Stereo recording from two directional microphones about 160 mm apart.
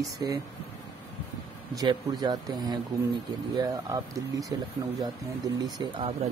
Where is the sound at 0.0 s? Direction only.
20° right (ahead or behind).